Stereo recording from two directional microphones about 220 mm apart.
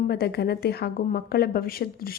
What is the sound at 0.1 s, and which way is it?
Speech, 45° left (ahead or behind).